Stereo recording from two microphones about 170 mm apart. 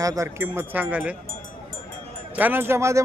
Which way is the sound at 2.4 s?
10° right (ahead or behind).